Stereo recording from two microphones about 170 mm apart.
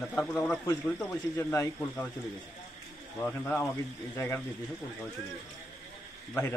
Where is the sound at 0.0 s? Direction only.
5° left (ahead or behind).